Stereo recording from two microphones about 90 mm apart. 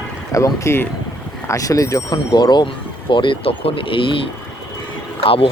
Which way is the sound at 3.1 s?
65° left (ahead or behind).